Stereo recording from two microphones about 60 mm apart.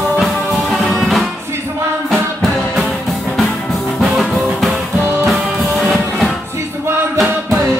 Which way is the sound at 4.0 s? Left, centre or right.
Centre.